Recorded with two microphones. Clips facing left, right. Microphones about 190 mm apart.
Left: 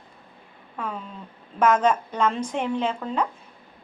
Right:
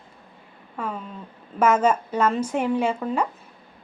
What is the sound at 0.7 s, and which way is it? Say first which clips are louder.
A woman's voice: right 2 dB; 5° right (ahead or behind).